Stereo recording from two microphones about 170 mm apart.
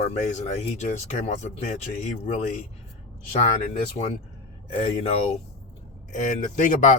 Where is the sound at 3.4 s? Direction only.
45° left (ahead or behind).